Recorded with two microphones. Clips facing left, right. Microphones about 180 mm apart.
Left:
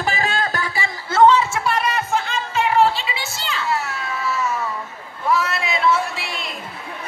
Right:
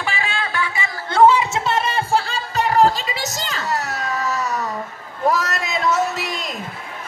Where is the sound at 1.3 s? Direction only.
20° right (ahead or behind); by 6.3 s 40° right (ahead or behind).